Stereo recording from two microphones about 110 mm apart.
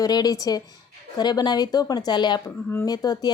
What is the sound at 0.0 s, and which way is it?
A woman's voice, 35° left (ahead or behind).